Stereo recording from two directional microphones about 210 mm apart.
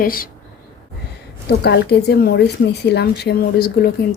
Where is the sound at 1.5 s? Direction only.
55° left (ahead or behind).